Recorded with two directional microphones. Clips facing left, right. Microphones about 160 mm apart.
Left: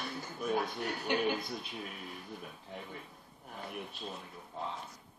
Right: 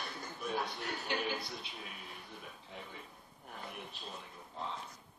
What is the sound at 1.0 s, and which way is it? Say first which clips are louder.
Speech: left 6 dB; 45° left (ahead or behind).